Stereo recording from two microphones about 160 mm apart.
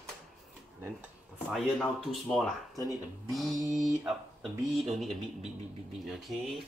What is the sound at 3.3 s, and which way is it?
Speech, centre (ahead or behind).